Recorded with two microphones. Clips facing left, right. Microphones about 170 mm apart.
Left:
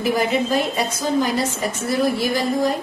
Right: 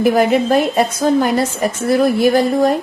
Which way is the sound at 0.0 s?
55° right (ahead or behind).